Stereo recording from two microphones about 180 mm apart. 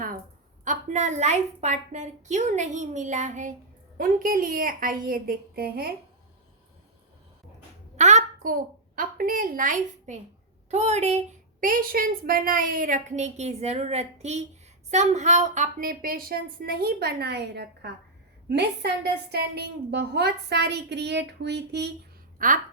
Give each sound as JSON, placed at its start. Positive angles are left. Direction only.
{"t": 0.6, "sound": "a woman's voice", "side_deg": -45}
{"t": 7.9, "sound": "a woman's voice", "side_deg": -40}
{"t": 22.4, "sound": "a woman's voice", "side_deg": -45}